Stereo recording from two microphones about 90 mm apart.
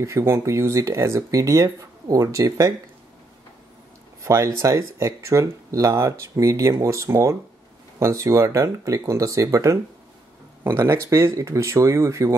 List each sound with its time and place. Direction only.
0.0 s speech: 30° right (ahead or behind)
4.2 s speech: 35° right (ahead or behind)